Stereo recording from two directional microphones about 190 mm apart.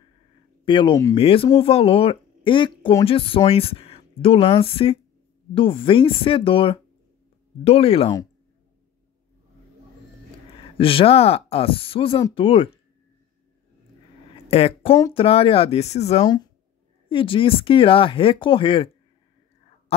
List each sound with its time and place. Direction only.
0.7 s speech: 25° left (ahead or behind)
10.6 s speech: 30° left (ahead or behind)
14.3 s a sound: 30° left (ahead or behind)
15.1 s speech: 30° left (ahead or behind)